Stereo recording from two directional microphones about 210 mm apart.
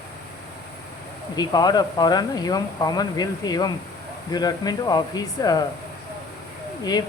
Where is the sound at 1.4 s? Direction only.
20° left (ahead or behind).